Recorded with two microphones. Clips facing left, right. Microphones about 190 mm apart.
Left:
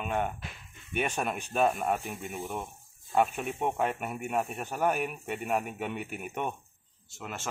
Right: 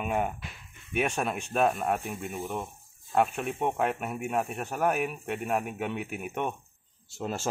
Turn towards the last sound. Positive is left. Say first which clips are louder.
# right 7 dB
turn(degrees=-30)  # may be behind; listen again after turning